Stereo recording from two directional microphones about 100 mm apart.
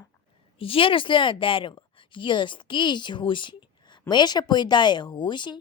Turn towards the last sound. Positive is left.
turn(degrees=50)  # may be behind; listen again after turning